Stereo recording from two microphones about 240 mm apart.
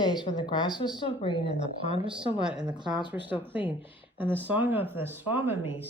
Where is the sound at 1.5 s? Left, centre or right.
Centre.